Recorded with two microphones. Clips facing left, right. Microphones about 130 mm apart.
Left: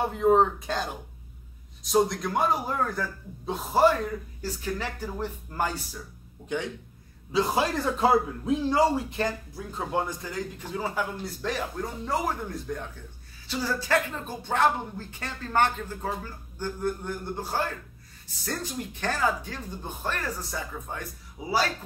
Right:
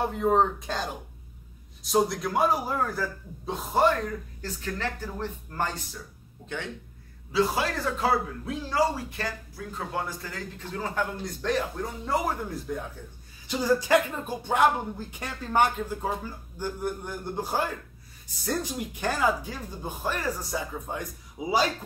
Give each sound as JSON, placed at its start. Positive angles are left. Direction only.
{"t": 0.0, "sound": "a man's voice", "side_deg": 0}
{"t": 13.5, "sound": "speech", "side_deg": -15}